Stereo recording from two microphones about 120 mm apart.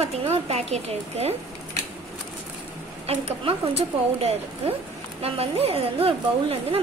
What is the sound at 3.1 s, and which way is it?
A woman's voice, 55° right (ahead or behind).